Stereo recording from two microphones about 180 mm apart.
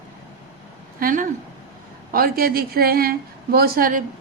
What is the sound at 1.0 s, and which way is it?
A woman's voice, 50° right (ahead or behind).